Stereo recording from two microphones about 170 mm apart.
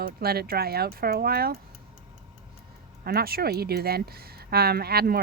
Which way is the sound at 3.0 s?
65° right (ahead or behind).